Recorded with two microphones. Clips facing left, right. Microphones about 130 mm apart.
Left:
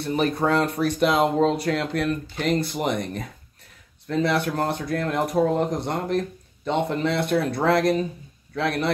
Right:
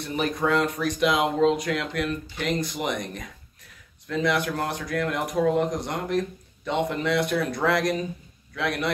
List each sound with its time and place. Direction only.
0.0 s speech: 30° left (ahead or behind)